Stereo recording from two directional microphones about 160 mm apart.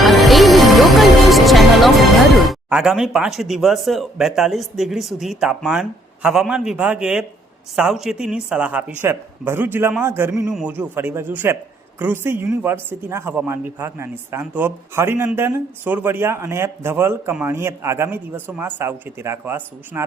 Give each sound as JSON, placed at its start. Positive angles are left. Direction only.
{"t": 0.0, "sound": "music", "side_deg": 0}
{"t": 7.8, "sound": "speech", "side_deg": -5}
{"t": 10.5, "sound": "a man's voice", "side_deg": 0}
{"t": 10.8, "sound": "speech", "side_deg": -15}